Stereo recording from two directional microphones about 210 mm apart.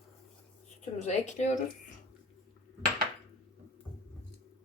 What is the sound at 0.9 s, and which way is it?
Speech, 35° left (ahead or behind).